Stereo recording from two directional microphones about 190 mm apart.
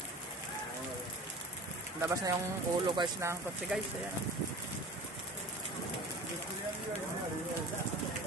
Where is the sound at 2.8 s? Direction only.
25° right (ahead or behind).